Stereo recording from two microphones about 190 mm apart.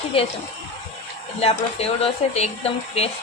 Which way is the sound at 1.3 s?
30° left (ahead or behind).